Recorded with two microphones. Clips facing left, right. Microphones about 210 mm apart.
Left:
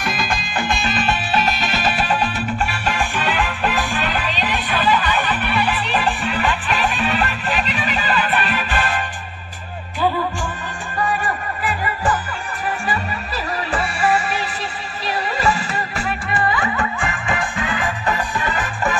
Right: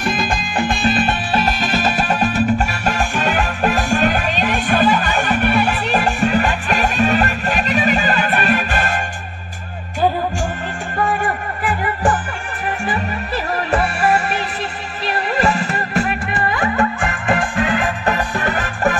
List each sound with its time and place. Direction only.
0.1 s music: 50° right (ahead or behind)
13.6 s music: 55° right (ahead or behind)
15.1 s music: 55° right (ahead or behind)